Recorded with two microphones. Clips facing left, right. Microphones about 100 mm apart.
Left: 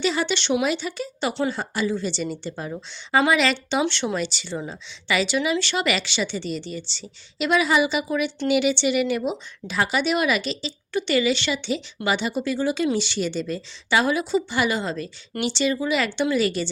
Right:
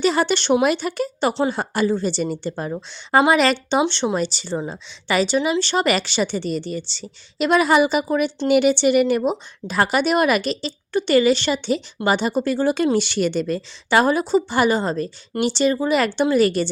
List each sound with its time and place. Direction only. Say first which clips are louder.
0.0 s a woman's voice: right 5 dB; 45° right (ahead or behind)
1.3 s a woman's voice: right 1 dB; 35° right (ahead or behind)
1.5 s a woman's voice: right 5 dB; 50° right (ahead or behind)